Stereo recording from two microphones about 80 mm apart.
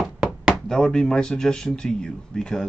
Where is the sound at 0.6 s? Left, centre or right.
Centre.